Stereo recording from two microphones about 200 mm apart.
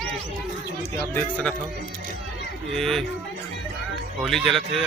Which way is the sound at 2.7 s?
Centre (ahead or behind).